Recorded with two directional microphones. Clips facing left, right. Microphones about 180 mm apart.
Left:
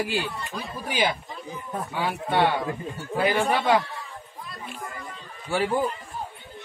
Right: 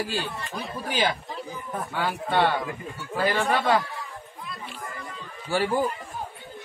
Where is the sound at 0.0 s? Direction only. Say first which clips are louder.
Left 2 dB; 15° left (ahead or behind).